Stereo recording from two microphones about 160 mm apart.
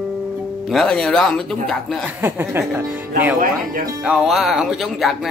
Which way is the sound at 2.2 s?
15° right (ahead or behind).